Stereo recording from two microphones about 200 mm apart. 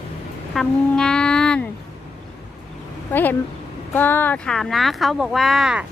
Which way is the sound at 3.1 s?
10° left (ahead or behind).